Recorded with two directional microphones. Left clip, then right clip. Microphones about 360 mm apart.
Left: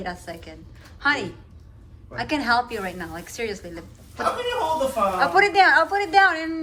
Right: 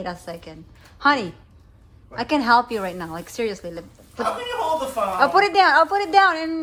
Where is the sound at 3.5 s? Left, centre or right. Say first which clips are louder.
Right 4 dB; right.